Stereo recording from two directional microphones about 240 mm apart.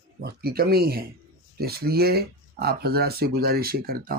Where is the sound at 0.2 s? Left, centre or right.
Right.